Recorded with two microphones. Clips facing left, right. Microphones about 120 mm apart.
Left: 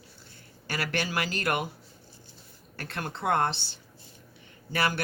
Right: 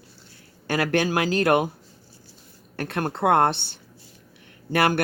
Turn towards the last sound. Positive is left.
turn(degrees=-55)  # may be behind; listen again after turning